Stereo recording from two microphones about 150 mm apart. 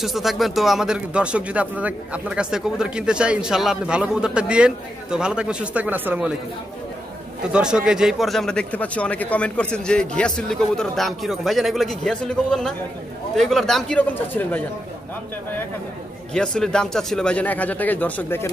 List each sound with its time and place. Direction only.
0.0 s speech: centre (ahead or behind)
7.5 s a man's voice: 5° right (ahead or behind); by 14.6 s 10° left (ahead or behind)
16.3 s speech: 5° left (ahead or behind)